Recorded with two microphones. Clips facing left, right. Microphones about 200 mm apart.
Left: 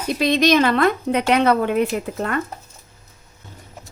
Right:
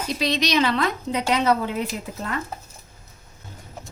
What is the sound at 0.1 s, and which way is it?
A woman's voice, 55° left (ahead or behind).